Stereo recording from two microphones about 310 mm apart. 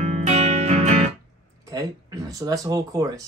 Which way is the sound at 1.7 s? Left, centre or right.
Centre.